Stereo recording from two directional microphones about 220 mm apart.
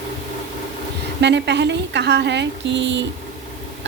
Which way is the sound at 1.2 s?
50° right (ahead or behind).